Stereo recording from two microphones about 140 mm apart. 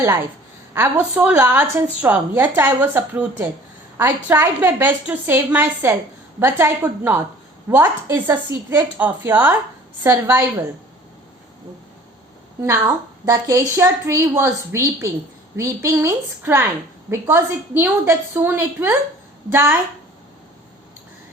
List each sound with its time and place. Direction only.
0.7 s a woman's voice: 15° right (ahead or behind)
12.8 s a woman's voice: 25° right (ahead or behind)